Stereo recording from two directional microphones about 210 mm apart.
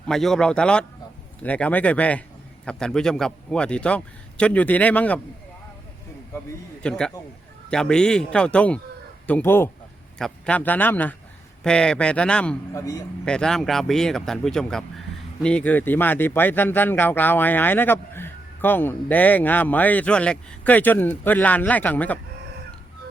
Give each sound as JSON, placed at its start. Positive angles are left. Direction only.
{"t": 0.1, "sound": "a man's voice", "side_deg": 0}
{"t": 6.8, "sound": "a man's voice", "side_deg": 5}
{"t": 12.7, "sound": "speech", "side_deg": 15}
{"t": 13.2, "sound": "a man's voice", "side_deg": 5}